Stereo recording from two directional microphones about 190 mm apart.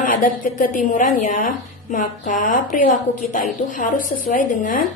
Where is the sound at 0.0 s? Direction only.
45° left (ahead or behind).